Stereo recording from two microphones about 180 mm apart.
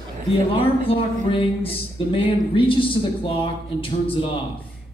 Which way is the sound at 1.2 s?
30° left (ahead or behind).